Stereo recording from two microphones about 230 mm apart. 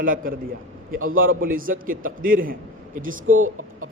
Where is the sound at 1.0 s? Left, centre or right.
Right.